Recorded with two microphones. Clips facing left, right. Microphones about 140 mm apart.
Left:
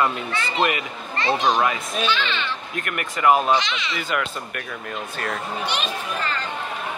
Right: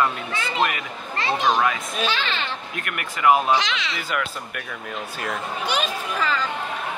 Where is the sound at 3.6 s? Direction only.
90° right.